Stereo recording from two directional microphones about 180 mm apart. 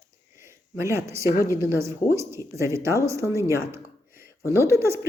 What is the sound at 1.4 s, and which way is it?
Speech, 15° right (ahead or behind).